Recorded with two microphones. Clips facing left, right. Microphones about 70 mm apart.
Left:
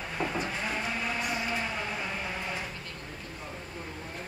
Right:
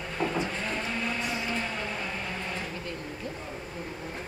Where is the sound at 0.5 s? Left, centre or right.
Centre.